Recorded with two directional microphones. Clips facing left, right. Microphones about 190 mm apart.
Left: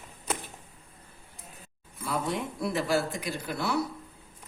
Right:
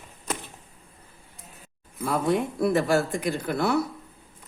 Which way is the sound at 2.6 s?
50° right (ahead or behind).